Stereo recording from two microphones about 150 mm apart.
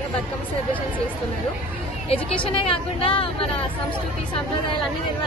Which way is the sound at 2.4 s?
35° left (ahead or behind).